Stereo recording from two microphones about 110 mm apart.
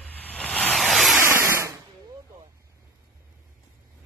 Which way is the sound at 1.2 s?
25° right (ahead or behind).